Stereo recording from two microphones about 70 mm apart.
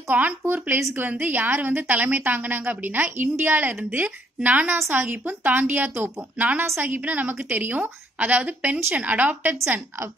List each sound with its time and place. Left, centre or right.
0.4 s a woman's voice: right